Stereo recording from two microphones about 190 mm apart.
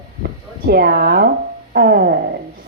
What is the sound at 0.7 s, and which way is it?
A woman's voice, 55° right (ahead or behind).